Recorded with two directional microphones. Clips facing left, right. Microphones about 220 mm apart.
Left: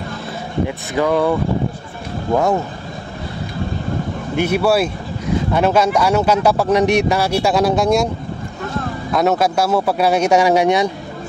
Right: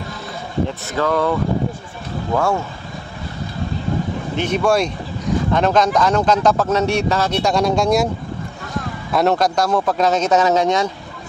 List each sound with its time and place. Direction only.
0.7 s speech: 15° left (ahead or behind)
2.3 s speech: 20° left (ahead or behind)
4.4 s speech: 10° left (ahead or behind)
9.1 s speech: centre (ahead or behind)